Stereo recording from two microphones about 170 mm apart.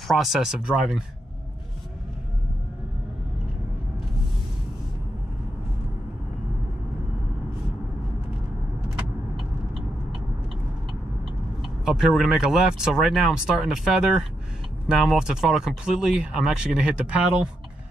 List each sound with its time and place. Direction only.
0.1 s speech: centre (ahead or behind)
8.9 s vehicle: centre (ahead or behind)
11.6 s speech: 5° right (ahead or behind)